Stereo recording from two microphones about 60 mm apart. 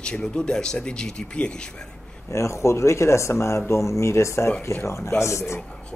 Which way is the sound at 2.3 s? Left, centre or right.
Left.